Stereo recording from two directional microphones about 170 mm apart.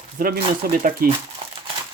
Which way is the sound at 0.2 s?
55° right (ahead or behind).